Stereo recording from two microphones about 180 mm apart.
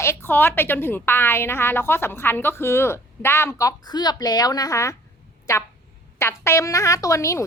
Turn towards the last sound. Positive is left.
turn(degrees=15)  # may be behind; listen again after turning